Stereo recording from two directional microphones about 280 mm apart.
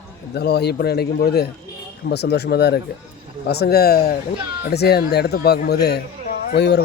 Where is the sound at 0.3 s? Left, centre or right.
Left.